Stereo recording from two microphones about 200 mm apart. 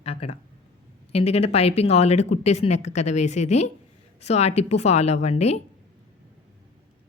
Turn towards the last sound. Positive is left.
turn(degrees=35)  # may be behind; listen again after turning